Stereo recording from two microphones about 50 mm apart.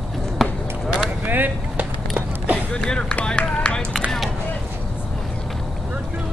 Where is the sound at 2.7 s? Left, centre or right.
Centre.